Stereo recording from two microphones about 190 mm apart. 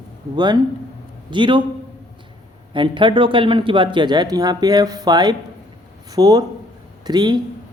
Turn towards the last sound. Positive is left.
turn(degrees=-20)  # may be behind; listen again after turning